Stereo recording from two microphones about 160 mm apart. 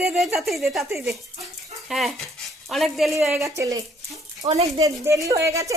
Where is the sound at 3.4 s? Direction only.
20° right (ahead or behind).